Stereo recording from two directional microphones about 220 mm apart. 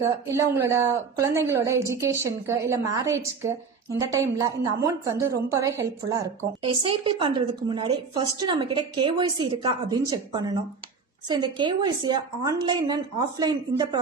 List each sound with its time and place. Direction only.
0.3 s a woman's voice: 10° right (ahead or behind)